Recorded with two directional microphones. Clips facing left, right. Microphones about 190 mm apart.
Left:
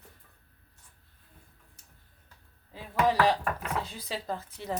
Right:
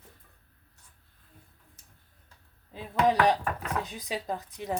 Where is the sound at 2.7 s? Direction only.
20° right (ahead or behind).